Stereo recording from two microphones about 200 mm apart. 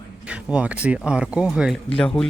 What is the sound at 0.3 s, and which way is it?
A man's voice, 5° right (ahead or behind).